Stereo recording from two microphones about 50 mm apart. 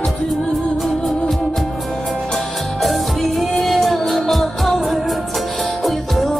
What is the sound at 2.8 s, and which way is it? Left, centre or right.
Music, centre.